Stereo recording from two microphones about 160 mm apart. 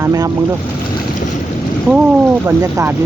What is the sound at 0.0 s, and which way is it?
Speech, 20° right (ahead or behind).